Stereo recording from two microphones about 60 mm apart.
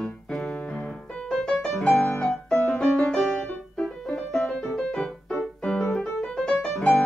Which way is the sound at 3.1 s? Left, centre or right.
Centre.